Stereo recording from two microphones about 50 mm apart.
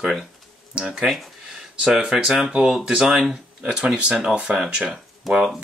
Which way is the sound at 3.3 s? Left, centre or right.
Centre.